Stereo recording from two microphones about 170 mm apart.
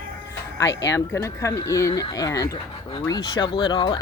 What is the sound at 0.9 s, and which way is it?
Speech, 20° left (ahead or behind).